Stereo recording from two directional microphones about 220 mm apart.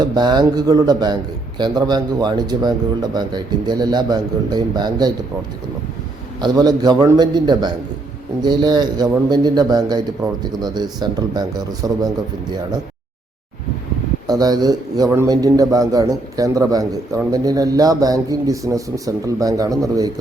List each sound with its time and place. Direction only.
0.0 s a man's voice: 20° right (ahead or behind)
6.4 s speech: 20° right (ahead or behind)
14.3 s a man's voice: 20° right (ahead or behind)